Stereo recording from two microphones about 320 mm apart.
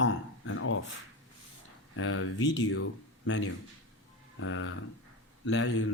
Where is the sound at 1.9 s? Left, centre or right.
Left.